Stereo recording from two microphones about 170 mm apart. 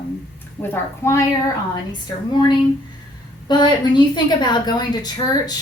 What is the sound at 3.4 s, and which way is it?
A woman's voice, 25° left (ahead or behind).